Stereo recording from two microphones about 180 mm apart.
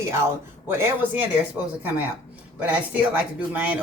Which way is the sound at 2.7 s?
10° right (ahead or behind).